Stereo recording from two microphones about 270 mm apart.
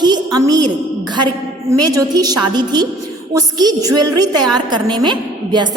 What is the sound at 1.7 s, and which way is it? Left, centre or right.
A woman's voice, centre.